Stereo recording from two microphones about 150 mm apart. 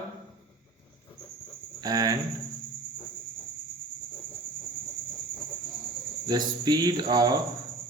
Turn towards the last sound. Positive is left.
turn(degrees=-30)  # may be behind; listen again after turning